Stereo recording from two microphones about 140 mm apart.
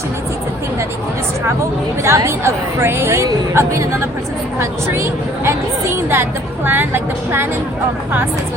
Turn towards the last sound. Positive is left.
turn(degrees=-15)  # may be behind; listen again after turning